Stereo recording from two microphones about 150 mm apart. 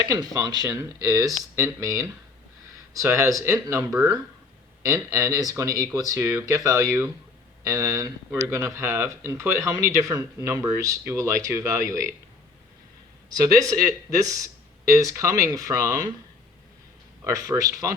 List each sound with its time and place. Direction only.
0.1 s speech: 25° right (ahead or behind)
13.3 s speech: 25° right (ahead or behind)
17.3 s speech: 20° right (ahead or behind)